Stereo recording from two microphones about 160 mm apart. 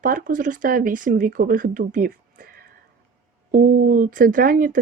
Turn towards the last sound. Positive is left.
turn(degrees=-60)  # may be behind; listen again after turning